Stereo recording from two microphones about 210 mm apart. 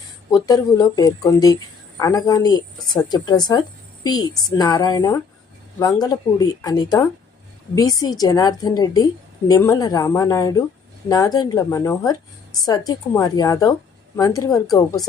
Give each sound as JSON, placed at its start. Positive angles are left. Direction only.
{"t": 0.3, "sound": "a woman's voice", "side_deg": 20}